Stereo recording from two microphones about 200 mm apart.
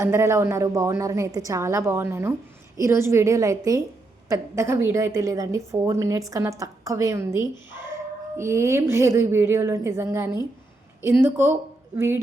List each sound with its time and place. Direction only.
0.0 s a woman's voice: 15° right (ahead or behind)